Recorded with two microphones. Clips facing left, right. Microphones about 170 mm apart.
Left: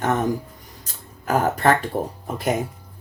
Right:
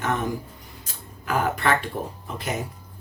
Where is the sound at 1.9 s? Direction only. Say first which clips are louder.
Left 5 dB; 70° left (ahead or behind).